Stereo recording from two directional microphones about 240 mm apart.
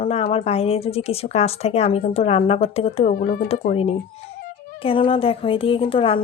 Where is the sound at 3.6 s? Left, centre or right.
Left.